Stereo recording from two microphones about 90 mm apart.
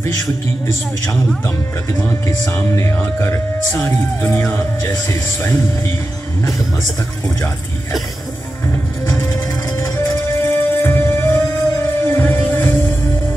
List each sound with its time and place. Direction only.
2.0 s speech: 30° left (ahead or behind)
9.0 s music: 40° left (ahead or behind)